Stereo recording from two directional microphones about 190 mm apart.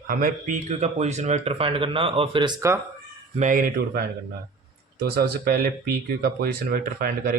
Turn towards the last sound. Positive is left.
turn(degrees=-50)  # may be behind; listen again after turning